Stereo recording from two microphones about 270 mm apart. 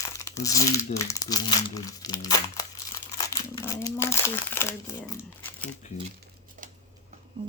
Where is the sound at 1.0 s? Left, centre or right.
Centre.